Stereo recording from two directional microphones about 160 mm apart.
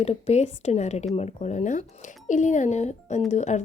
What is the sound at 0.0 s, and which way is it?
Speech, 40° left (ahead or behind).